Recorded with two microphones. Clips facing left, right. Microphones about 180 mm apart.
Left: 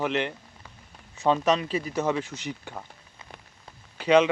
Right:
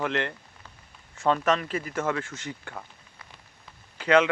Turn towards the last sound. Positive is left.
turn(degrees=15)  # may be behind; listen again after turning